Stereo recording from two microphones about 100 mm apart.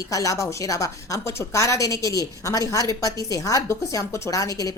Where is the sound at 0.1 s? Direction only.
35° left (ahead or behind).